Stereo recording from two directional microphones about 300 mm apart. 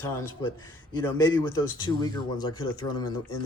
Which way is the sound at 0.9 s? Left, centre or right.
Centre.